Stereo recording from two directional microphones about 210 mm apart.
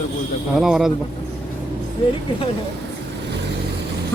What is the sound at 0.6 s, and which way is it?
Speech, centre (ahead or behind).